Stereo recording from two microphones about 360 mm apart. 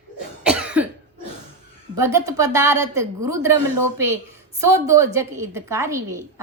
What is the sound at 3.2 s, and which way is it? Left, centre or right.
Speech, centre.